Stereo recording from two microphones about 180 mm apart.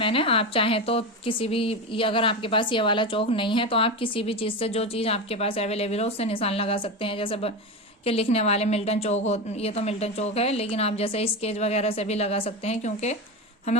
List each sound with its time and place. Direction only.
0.0 s a woman's voice: 30° left (ahead or behind)